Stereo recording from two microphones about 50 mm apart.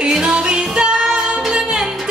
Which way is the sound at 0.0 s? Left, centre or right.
Centre.